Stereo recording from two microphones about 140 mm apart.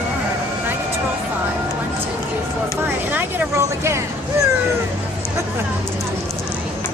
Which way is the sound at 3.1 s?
15° right (ahead or behind).